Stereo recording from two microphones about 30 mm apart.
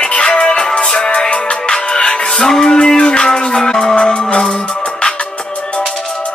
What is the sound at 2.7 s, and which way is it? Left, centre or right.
Music, left.